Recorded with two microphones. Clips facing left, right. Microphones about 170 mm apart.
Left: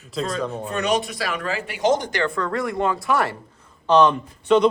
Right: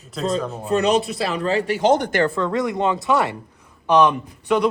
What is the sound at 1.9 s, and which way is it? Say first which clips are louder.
Speech: right 3 dB; 60° right (ahead or behind).